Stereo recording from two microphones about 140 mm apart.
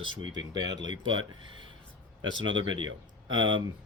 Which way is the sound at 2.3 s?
35° right (ahead or behind).